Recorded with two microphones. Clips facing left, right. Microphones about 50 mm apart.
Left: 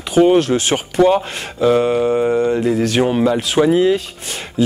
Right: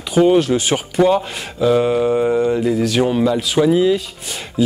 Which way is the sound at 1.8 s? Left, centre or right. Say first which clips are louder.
Even; centre.